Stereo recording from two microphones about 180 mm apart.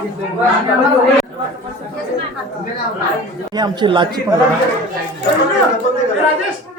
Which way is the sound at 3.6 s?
25° right (ahead or behind).